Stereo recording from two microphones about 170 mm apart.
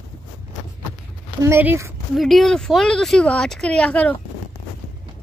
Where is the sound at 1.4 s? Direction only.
15° right (ahead or behind).